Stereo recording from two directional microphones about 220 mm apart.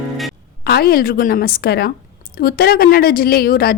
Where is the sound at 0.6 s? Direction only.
45° left (ahead or behind).